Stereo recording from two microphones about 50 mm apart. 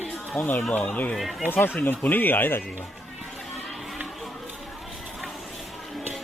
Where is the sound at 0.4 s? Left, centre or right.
Left.